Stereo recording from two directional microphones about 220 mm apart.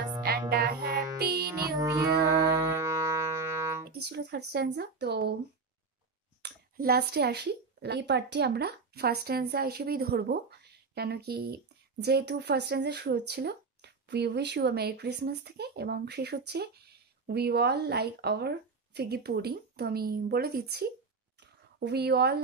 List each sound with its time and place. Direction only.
0.5 s music: 45° right (ahead or behind)
1.8 s music: 15° right (ahead or behind)
3.9 s speech: 45° right (ahead or behind)
6.4 s speech: 45° right (ahead or behind)